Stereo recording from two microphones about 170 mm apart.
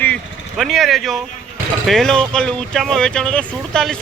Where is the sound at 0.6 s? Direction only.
Centre (ahead or behind).